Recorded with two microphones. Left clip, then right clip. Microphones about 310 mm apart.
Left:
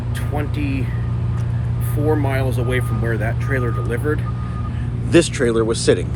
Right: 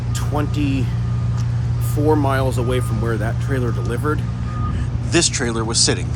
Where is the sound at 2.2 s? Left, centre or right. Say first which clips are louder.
Right 3 dB; centre.